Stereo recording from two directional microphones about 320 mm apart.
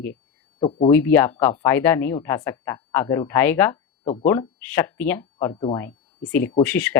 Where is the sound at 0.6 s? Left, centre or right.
Centre.